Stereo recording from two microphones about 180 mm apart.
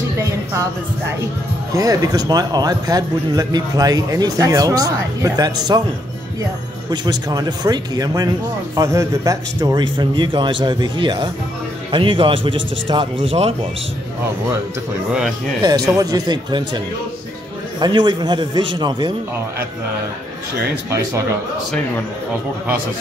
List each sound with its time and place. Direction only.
0.2 s a sound: 15° right (ahead or behind)
1.7 s a man's voice: 20° right (ahead or behind)
6.9 s a man's voice: 20° right (ahead or behind)
15.1 s speech: centre (ahead or behind)
15.6 s a man's voice: 20° right (ahead or behind)